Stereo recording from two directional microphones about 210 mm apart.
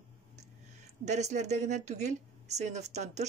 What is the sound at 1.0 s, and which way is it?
Speech, 35° right (ahead or behind).